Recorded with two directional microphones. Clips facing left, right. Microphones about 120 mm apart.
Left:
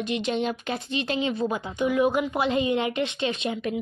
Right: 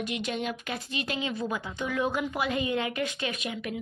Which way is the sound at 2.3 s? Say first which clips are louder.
Left 5 dB; 25° left (ahead or behind).